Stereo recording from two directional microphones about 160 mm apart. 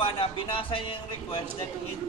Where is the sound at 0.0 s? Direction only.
35° left (ahead or behind).